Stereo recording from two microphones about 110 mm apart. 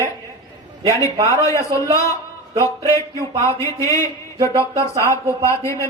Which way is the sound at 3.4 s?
30° left (ahead or behind).